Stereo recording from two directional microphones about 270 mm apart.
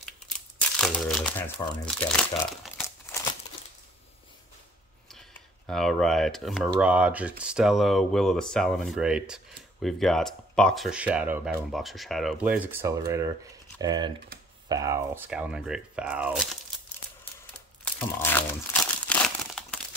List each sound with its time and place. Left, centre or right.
0.7 s crumpling: centre
1.9 s speech: centre
5.1 s speech: centre
17.8 s crumpling: centre